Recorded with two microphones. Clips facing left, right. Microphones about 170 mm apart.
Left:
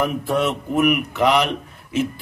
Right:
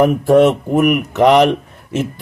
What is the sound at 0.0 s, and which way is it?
Speech, 45° right (ahead or behind).